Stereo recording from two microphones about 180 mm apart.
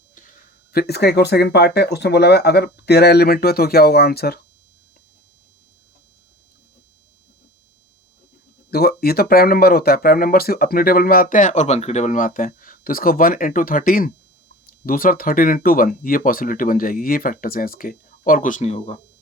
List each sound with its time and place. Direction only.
0.7 s speech: 60° left (ahead or behind)
8.7 s speech: 60° left (ahead or behind); by 18.9 s 35° left (ahead or behind)